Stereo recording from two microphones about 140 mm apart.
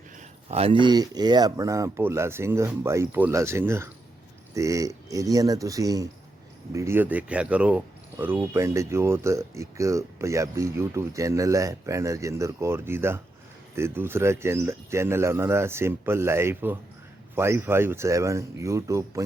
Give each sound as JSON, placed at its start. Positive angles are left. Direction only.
{"t": 0.4, "sound": "speech", "side_deg": -45}